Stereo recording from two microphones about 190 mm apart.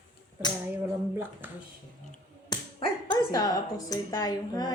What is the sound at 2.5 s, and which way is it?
Speech, 25° left (ahead or behind).